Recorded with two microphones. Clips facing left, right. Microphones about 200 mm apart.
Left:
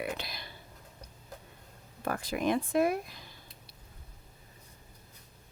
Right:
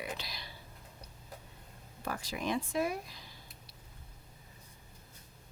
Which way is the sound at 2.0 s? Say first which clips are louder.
Left 6 dB; 55° left (ahead or behind).